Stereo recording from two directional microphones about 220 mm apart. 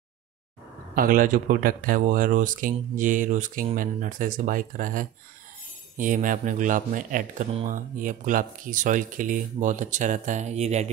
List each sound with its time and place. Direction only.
0.9 s speech: 40° right (ahead or behind)